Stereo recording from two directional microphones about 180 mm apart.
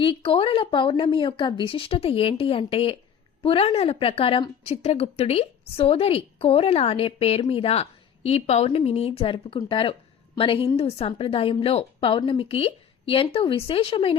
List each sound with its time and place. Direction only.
0.0 s a woman's voice: 30° left (ahead or behind)